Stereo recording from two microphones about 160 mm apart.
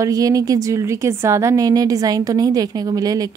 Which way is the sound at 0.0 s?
20° right (ahead or behind).